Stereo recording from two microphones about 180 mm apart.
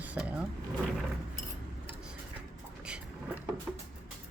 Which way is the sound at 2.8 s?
5° right (ahead or behind).